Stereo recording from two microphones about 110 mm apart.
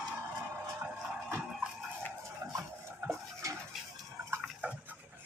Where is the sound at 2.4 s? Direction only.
35° right (ahead or behind).